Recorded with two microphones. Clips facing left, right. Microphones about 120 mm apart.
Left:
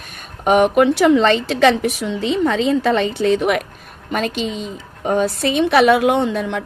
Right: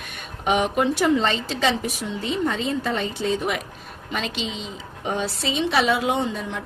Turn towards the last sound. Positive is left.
turn(degrees=70)  # may be behind; listen again after turning